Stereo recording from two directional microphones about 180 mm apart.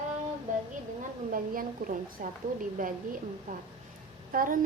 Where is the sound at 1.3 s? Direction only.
50° right (ahead or behind).